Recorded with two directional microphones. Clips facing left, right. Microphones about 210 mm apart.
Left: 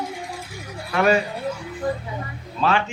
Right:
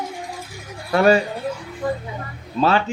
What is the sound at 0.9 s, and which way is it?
Speech, 35° right (ahead or behind).